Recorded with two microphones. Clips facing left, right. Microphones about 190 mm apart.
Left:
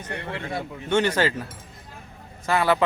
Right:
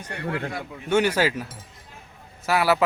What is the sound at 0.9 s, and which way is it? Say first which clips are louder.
Speech: right 1 dB; 10° right (ahead or behind).